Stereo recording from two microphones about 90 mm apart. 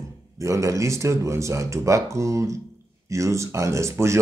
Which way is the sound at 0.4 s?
35° right (ahead or behind).